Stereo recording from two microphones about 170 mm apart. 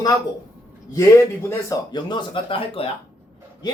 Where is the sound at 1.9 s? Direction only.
30° left (ahead or behind).